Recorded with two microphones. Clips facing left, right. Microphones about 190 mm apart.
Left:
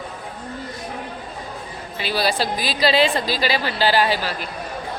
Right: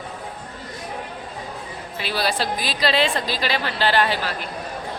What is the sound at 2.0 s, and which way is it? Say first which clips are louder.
A woman's voice: left 2 dB; centre (ahead or behind).